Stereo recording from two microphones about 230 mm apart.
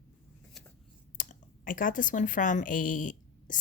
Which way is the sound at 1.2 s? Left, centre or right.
Left.